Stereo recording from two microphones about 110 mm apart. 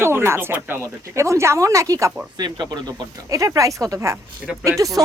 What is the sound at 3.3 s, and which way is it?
Speech, 30° right (ahead or behind).